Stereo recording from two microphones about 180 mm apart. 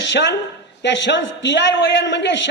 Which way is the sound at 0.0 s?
80° left.